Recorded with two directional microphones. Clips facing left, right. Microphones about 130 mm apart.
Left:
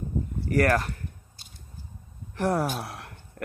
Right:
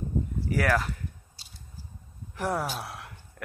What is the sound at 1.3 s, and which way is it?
Biting, 55° left (ahead or behind).